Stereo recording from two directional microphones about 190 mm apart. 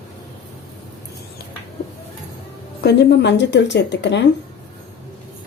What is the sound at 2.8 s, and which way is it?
Speech, 65° left (ahead or behind).